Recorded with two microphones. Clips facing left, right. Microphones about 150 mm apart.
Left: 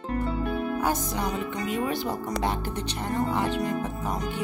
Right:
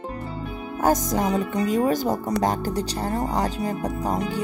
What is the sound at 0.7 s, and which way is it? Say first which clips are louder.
Speech: right 6 dB; 40° right (ahead or behind).